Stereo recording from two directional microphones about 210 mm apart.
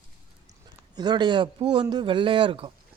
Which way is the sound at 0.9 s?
20° right (ahead or behind).